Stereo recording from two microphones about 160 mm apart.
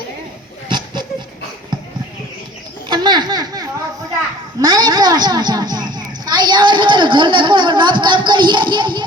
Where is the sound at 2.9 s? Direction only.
25° right (ahead or behind).